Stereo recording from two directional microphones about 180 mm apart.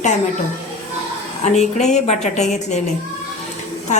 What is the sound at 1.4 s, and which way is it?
A woman's voice, 40° left (ahead or behind).